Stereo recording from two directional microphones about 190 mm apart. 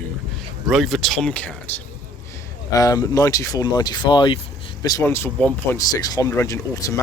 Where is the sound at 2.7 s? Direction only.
20° left (ahead or behind).